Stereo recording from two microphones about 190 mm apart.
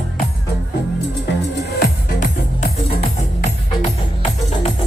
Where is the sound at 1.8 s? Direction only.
40° left (ahead or behind).